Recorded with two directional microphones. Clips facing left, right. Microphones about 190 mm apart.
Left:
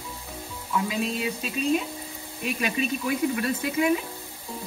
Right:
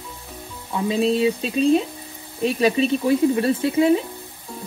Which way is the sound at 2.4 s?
35° right (ahead or behind).